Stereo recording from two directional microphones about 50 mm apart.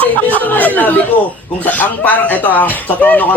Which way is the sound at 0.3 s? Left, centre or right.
Left.